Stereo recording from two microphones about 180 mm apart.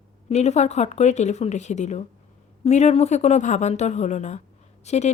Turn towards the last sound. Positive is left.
turn(degrees=40)  # may be behind; listen again after turning